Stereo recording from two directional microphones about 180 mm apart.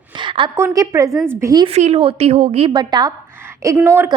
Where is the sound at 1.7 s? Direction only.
35° right (ahead or behind); by 4.1 s 15° right (ahead or behind).